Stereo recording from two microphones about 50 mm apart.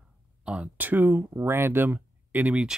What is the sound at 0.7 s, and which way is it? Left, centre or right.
Speech, right.